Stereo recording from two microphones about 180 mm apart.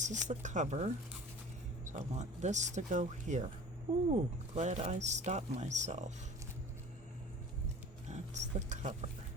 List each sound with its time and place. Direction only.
0.0 s speech: 40° right (ahead or behind)
4.5 s speech: 40° right (ahead or behind)
8.1 s speech: 40° right (ahead or behind)